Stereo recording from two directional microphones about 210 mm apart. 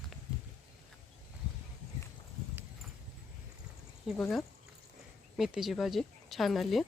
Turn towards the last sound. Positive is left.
turn(degrees=0)  # may be behind; listen again after turning